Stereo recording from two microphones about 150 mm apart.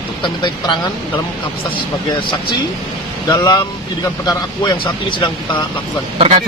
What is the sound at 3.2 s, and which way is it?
Speech, 25° left (ahead or behind).